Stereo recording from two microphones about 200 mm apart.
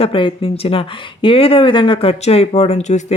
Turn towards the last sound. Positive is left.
turn(degrees=35)  # may be behind; listen again after turning